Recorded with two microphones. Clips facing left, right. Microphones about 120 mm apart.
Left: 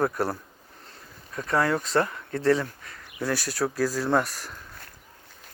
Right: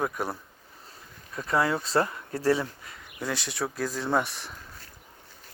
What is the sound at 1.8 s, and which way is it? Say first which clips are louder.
Speech: left 1 dB; 35° right (ahead or behind).